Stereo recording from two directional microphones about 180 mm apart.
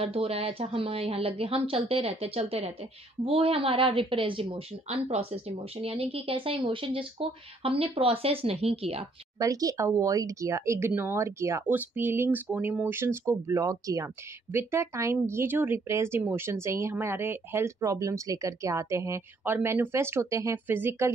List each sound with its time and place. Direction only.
0.0 s a woman's voice: 35° right (ahead or behind)
9.4 s speech: 20° right (ahead or behind)